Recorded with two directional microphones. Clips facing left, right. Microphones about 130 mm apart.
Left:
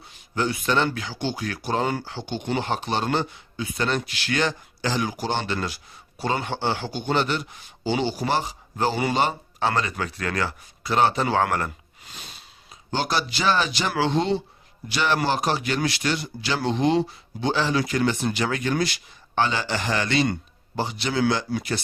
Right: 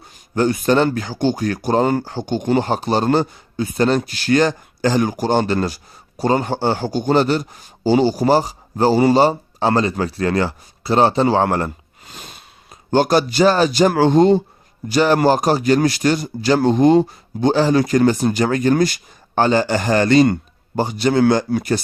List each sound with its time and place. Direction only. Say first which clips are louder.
0.0 s speech: right 8 dB; 45° right (ahead or behind)
12.1 s a sound: right 5 dB; 50° right (ahead or behind)
12.9 s a man's voice: right 10 dB; 45° right (ahead or behind)